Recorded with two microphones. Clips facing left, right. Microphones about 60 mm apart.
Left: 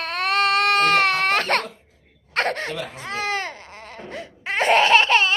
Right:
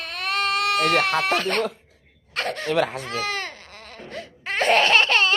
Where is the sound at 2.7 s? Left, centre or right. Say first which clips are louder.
Right 9 dB; right.